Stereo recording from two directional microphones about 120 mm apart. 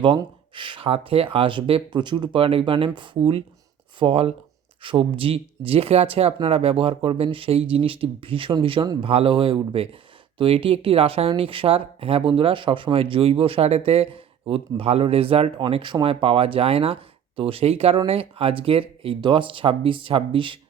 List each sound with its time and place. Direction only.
0.5 s speech: 45° right (ahead or behind)